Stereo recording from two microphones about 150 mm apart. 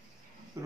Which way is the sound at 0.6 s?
20° right (ahead or behind).